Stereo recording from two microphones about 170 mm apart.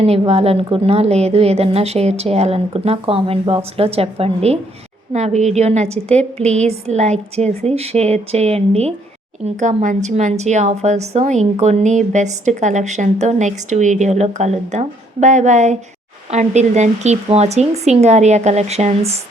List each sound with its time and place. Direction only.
0.0 s a woman's voice: 35° right (ahead or behind)